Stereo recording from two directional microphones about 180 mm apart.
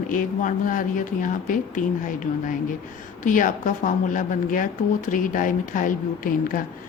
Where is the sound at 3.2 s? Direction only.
45° left (ahead or behind).